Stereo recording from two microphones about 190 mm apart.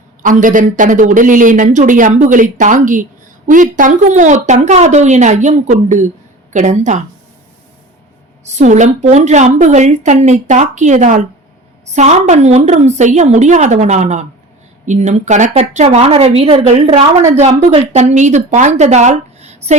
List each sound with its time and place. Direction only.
0.2 s speech: 45° right (ahead or behind)
8.4 s speech: 40° right (ahead or behind)
16.8 s a woman's voice: 20° right (ahead or behind)
17.3 s speech: 35° right (ahead or behind)